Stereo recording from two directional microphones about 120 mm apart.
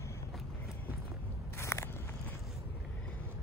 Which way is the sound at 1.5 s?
25° left (ahead or behind).